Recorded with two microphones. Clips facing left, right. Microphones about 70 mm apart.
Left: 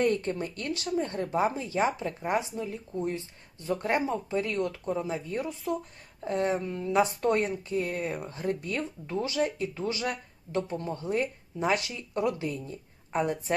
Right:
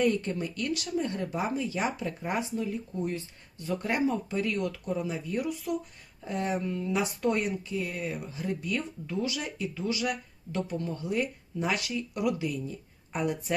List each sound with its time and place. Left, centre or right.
0.0 s speech: left